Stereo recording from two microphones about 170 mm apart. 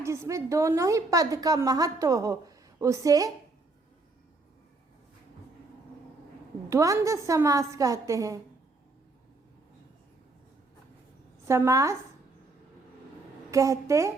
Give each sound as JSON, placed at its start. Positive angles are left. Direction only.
{"t": 0.0, "sound": "a woman's voice", "side_deg": -15}
{"t": 6.7, "sound": "a woman's voice", "side_deg": -20}
{"t": 11.4, "sound": "a woman's voice", "side_deg": -15}
{"t": 13.5, "sound": "a woman's voice", "side_deg": -20}